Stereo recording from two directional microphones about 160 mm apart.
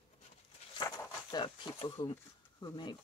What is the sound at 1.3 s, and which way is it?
Speech, 30° left (ahead or behind).